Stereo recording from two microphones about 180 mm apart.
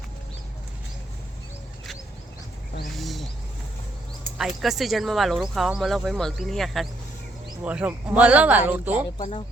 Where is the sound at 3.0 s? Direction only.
Centre (ahead or behind).